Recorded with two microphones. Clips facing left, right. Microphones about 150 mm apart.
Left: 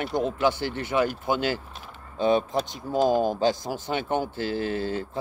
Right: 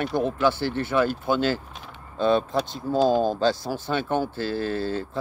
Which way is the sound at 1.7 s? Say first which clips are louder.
Right 1 dB; centre (ahead or behind).